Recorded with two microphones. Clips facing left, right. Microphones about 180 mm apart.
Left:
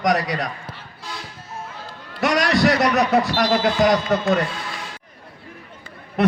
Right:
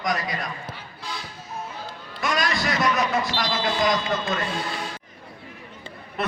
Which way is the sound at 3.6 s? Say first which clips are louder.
Left 4 dB; 65° left (ahead or behind).